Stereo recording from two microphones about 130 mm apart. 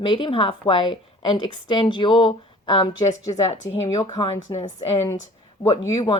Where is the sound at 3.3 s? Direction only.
55° left (ahead or behind).